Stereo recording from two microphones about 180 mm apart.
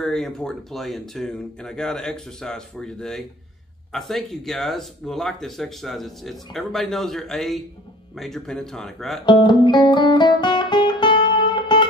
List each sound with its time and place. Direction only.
0.0 s speech: 5° left (ahead or behind)
9.2 s music: 25° left (ahead or behind)